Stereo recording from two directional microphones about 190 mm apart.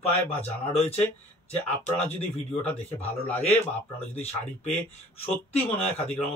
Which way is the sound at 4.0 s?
35° left (ahead or behind).